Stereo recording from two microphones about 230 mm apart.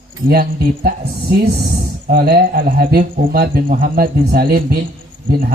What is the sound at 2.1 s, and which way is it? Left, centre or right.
A man's voice, right.